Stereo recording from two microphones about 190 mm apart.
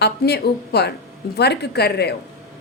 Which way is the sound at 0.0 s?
60° left (ahead or behind).